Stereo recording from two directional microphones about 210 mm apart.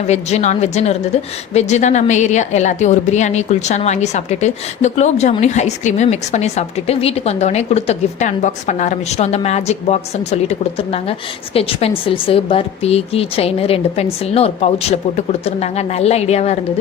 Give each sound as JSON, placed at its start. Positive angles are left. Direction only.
{"t": 0.1, "sound": "a woman's voice", "side_deg": 30}